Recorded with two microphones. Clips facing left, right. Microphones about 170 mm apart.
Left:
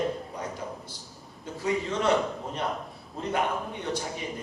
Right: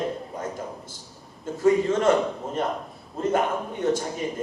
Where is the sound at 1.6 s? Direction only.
45° right (ahead or behind).